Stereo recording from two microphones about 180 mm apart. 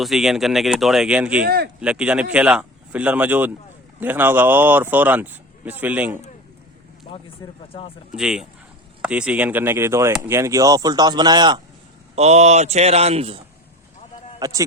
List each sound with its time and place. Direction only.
0.0 s speech: centre (ahead or behind)
1.5 s speech: 60° right (ahead or behind)
1.8 s speech: 5° right (ahead or behind)
7.7 s speech: 30° left (ahead or behind)
8.1 s speech: 5° right (ahead or behind); by 11.6 s 25° right (ahead or behind)
12.1 s a man's voice: 35° right (ahead or behind)
14.3 s speech: 20° right (ahead or behind)